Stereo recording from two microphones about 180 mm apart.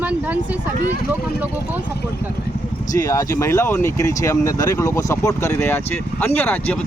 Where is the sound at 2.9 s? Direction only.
20° left (ahead or behind).